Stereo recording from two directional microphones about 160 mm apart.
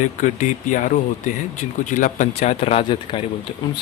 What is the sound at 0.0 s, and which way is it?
Speech, 50° left (ahead or behind).